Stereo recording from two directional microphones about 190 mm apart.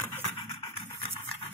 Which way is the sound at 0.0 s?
10° left (ahead or behind).